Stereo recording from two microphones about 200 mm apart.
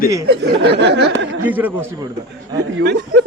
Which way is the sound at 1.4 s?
10° right (ahead or behind).